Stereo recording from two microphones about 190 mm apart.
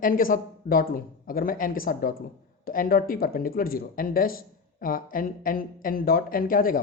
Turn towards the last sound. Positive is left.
turn(degrees=50)  # may be behind; listen again after turning